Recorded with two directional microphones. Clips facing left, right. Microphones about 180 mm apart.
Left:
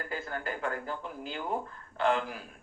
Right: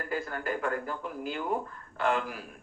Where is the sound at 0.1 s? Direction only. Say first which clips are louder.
Right 5 dB; 25° left (ahead or behind).